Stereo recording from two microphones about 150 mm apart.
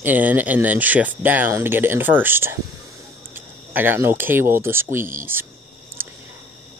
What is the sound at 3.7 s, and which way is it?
Speech, 15° right (ahead or behind).